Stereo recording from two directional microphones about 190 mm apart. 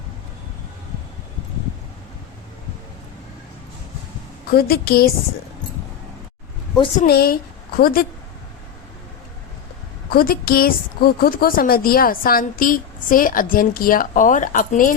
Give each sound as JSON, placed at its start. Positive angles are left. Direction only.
{"t": 4.5, "sound": "a woman's voice", "side_deg": 55}
{"t": 7.1, "sound": "a woman's voice", "side_deg": 55}
{"t": 10.1, "sound": "a woman's voice", "side_deg": 50}